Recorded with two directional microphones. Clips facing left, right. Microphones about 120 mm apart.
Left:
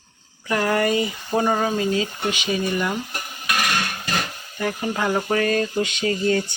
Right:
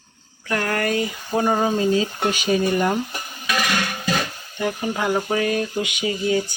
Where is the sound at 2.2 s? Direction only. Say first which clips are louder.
Right 4 dB; 45° right (ahead or behind).